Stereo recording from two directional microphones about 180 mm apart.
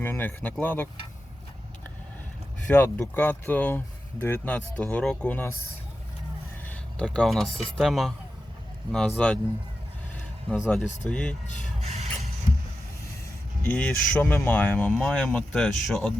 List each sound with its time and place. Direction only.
0.0 s speech: 10° left (ahead or behind)
2.6 s speech: 10° left (ahead or behind)
6.7 s speech: 5° left (ahead or behind)
11.1 s speech: 5° left (ahead or behind)
11.8 s vehicle: 35° right (ahead or behind)
13.6 s speech: 10° left (ahead or behind)